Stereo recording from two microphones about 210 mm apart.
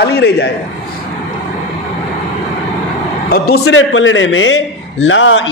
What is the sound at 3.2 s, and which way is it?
Speech, 45° left (ahead or behind).